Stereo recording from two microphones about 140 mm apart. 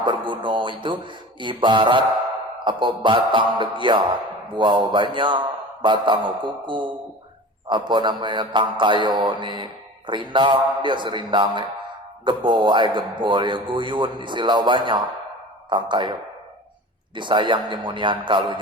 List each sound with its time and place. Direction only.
0.0 s speech: 35° right (ahead or behind)
17.2 s speech: 35° right (ahead or behind)